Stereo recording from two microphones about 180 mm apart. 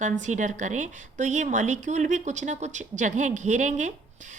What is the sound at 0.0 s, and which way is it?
A woman's voice, 40° right (ahead or behind).